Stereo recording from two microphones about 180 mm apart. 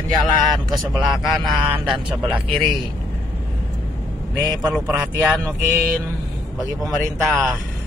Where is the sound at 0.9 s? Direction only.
Centre (ahead or behind).